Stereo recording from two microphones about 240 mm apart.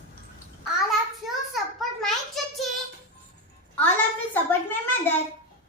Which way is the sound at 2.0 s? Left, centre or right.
Centre.